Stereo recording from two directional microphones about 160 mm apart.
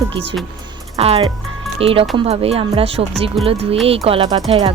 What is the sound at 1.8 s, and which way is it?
Speech, 35° right (ahead or behind).